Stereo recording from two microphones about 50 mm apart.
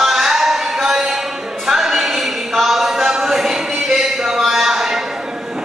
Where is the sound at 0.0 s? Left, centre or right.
Centre.